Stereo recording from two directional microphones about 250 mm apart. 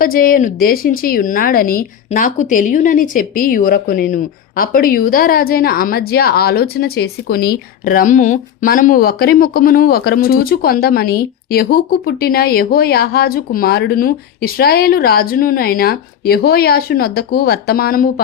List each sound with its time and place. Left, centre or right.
0.0 s a woman's voice: left